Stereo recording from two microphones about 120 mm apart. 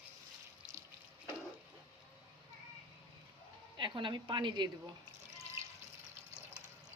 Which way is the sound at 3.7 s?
40° right (ahead or behind).